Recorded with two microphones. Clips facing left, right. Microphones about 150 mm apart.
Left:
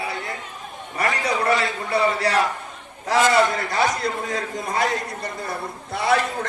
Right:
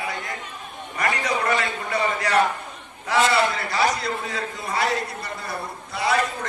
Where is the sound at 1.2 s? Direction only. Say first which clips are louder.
Left 4 dB; 35° left (ahead or behind).